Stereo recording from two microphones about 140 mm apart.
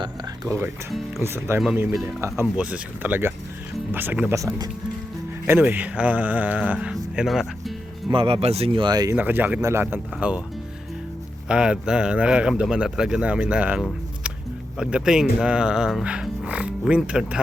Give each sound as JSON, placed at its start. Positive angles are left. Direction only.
{"t": 0.0, "sound": "speech", "side_deg": -20}
{"t": 5.5, "sound": "speech", "side_deg": -15}
{"t": 8.1, "sound": "speech", "side_deg": -40}
{"t": 9.1, "sound": "speech", "side_deg": -15}
{"t": 11.4, "sound": "speech", "side_deg": -5}